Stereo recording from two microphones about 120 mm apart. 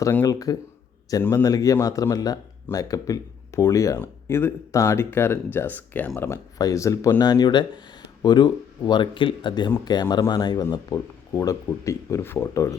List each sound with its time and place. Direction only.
0.3 s speech: 30° left (ahead or behind)